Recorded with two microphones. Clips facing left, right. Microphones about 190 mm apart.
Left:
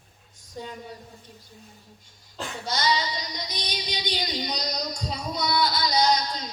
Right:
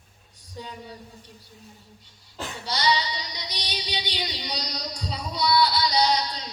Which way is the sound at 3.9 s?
45° left (ahead or behind).